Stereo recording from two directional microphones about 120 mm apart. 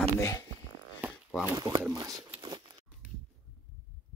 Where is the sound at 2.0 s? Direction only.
30° right (ahead or behind).